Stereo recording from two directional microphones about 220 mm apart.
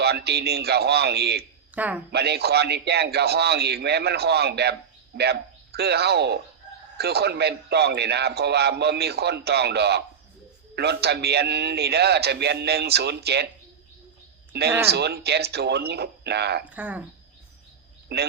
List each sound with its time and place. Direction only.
0.0 s a man's voice: 50° right (ahead or behind)
1.7 s speech: 5° right (ahead or behind)
2.1 s a man's voice: 45° right (ahead or behind)
14.5 s a man's voice: 50° right (ahead or behind)
16.6 s speech: 5° right (ahead or behind)
18.1 s a man's voice: 50° right (ahead or behind)